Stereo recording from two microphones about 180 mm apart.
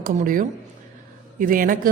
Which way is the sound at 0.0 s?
50° right (ahead or behind).